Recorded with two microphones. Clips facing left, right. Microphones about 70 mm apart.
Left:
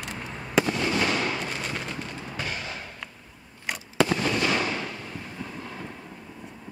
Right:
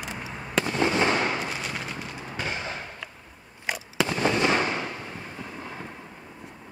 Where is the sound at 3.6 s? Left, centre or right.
Centre.